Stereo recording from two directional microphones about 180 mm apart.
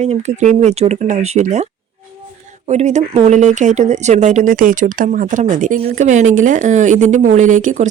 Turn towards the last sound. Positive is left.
turn(degrees=-45)  # may be behind; listen again after turning